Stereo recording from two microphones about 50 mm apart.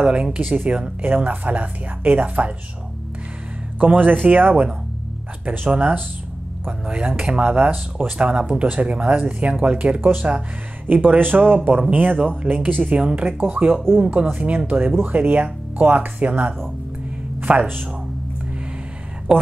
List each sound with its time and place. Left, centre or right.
0.0 s speech: right
0.4 s speech: right
0.7 s speech: right
1.0 s speech: right
3.8 s speech: right
12.9 s speech: right
17.4 s music: right